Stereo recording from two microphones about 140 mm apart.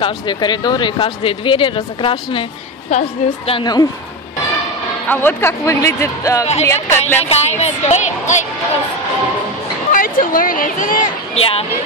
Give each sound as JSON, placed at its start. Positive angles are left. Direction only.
{"t": 0.0, "sound": "speech", "side_deg": 30}
{"t": 2.9, "sound": "a woman's voice", "side_deg": 55}
{"t": 3.5, "sound": "speech", "side_deg": 30}
{"t": 5.0, "sound": "speech", "side_deg": 15}
{"t": 7.2, "sound": "speech", "side_deg": 50}
{"t": 9.9, "sound": "speech", "side_deg": 80}
{"t": 11.3, "sound": "speech", "side_deg": 45}